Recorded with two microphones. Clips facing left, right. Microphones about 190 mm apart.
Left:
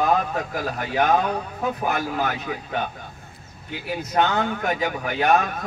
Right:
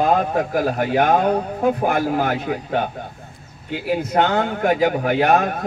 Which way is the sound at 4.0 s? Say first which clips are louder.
Right 2 dB; 55° right (ahead or behind).